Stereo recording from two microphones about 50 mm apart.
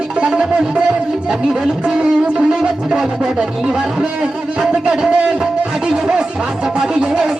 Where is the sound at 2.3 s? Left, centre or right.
Centre.